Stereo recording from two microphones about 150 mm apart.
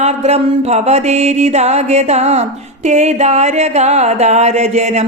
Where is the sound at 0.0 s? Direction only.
45° right (ahead or behind).